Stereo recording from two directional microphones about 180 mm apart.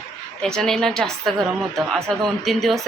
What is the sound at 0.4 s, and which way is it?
A man's voice, 5° left (ahead or behind).